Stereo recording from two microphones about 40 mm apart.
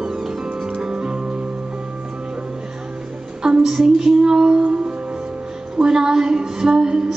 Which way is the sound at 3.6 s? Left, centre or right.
Centre.